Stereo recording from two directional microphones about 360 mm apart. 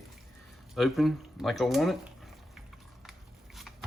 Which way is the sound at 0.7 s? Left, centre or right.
Centre.